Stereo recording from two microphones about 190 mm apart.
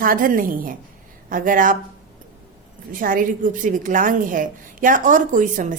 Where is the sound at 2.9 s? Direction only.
45° right (ahead or behind).